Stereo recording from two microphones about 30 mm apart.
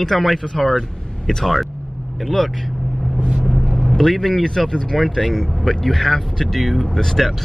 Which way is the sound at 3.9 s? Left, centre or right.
Centre.